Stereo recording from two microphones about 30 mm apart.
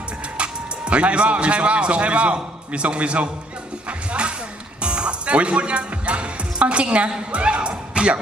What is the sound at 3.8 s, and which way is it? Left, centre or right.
Music, right.